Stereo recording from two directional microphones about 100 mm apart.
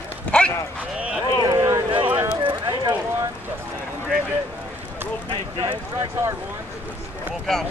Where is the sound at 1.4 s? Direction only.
40° right (ahead or behind).